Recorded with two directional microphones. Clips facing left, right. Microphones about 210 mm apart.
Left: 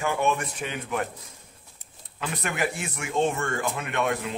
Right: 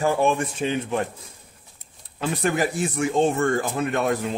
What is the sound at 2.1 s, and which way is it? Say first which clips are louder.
Speech: right 7 dB; 35° right (ahead or behind).